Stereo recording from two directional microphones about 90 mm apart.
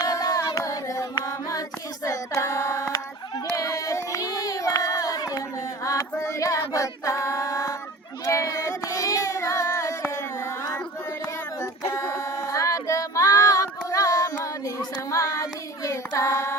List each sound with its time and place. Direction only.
0.0 s a capella: 40° left (ahead or behind)
2.0 s child singing: 30° left (ahead or behind)
2.9 s a sound: 40° left (ahead or behind)
5.8 s female singing: 35° left (ahead or behind)
8.2 s child singing: 35° left (ahead or behind)
10.1 s carnatic music: 35° left (ahead or behind)
11.6 s female singing: 30° left (ahead or behind)